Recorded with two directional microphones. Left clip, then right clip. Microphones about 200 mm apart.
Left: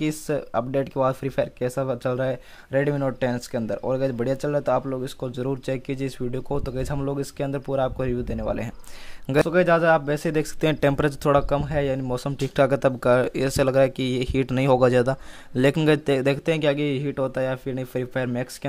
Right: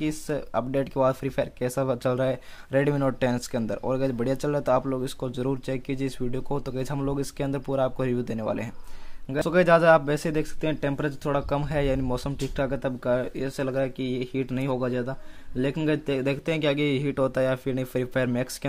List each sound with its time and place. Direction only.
0.0 s speech: 15° left (ahead or behind)
11.4 s speech: 10° left (ahead or behind)
12.5 s speech: 25° left (ahead or behind); by 18.7 s 5° left (ahead or behind)